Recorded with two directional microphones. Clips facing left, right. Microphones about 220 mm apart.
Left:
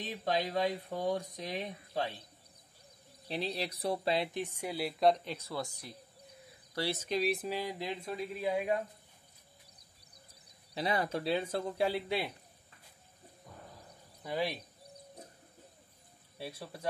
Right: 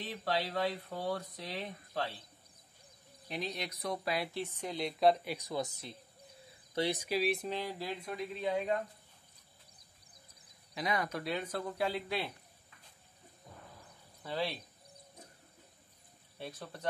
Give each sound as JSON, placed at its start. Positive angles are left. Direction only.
{"t": 0.0, "sound": "speech", "side_deg": 15}
{"t": 3.3, "sound": "speech", "side_deg": 30}
{"t": 10.7, "sound": "speech", "side_deg": 30}
{"t": 14.2, "sound": "speech", "side_deg": 15}
{"t": 16.3, "sound": "speech", "side_deg": 10}